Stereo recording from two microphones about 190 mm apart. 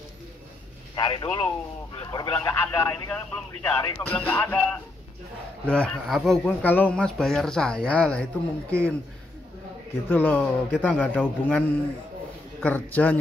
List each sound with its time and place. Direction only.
0.9 s speech: 25° left (ahead or behind); by 8.9 s 5° left (ahead or behind)
10.0 s speech: 10° left (ahead or behind)